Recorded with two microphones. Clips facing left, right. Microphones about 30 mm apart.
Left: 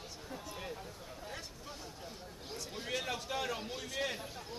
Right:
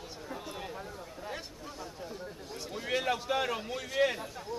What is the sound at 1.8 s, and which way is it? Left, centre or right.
Speech, centre.